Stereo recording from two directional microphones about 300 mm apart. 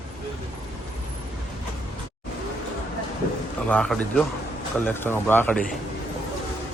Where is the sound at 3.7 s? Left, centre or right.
Centre.